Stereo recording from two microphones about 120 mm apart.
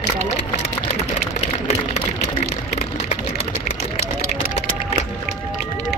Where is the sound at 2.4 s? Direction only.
70° left (ahead or behind).